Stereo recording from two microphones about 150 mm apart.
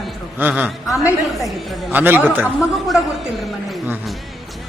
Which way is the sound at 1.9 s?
10° right (ahead or behind).